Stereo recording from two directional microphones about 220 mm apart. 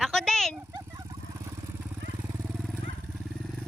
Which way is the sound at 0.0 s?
Centre (ahead or behind).